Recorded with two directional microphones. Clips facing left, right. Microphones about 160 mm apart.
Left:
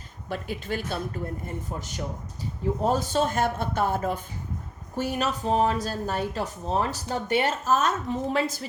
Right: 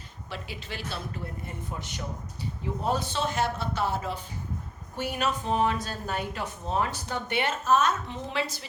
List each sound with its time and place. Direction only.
0.3 s speech: 50° left (ahead or behind)
2.8 s speech: 45° left (ahead or behind)
4.9 s speech: 40° left (ahead or behind)